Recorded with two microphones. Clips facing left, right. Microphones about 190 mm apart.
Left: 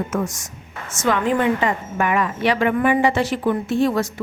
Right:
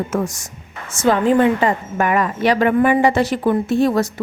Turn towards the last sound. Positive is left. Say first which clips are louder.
# right 3 dB
turn(degrees=-40)  # may be behind; listen again after turning